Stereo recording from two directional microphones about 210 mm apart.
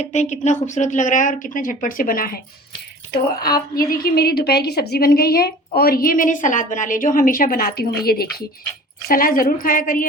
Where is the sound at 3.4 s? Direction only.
45° left (ahead or behind).